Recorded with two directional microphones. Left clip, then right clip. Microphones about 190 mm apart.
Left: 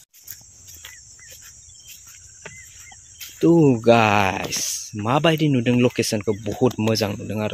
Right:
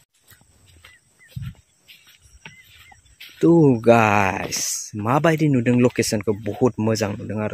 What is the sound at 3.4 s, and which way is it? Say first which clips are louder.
Speech: right 1 dB; 15° right (ahead or behind).